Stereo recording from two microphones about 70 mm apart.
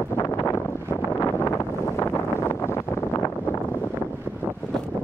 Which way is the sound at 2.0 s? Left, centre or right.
Left.